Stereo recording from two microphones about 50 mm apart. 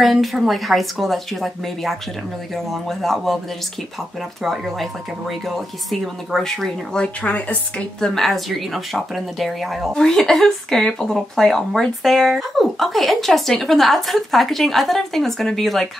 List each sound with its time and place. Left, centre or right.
0.0 s speech: centre
4.4 s speech: centre
7.0 s speech: left
8.0 s speech: centre
9.9 s speech: centre